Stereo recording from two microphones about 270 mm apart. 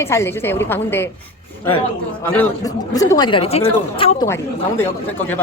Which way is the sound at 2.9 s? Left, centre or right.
Centre.